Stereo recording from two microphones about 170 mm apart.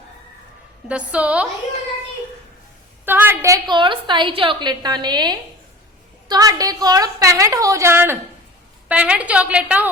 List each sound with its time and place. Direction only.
0.9 s a woman's voice: 5° right (ahead or behind)
3.1 s a woman's voice: 10° right (ahead or behind)